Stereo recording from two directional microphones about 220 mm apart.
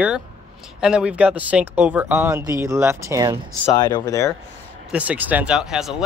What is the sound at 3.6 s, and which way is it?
Speech, 20° left (ahead or behind).